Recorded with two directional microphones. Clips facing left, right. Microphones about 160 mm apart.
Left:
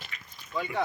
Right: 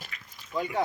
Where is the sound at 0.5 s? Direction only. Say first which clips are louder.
Right 2 dB; 15° right (ahead or behind).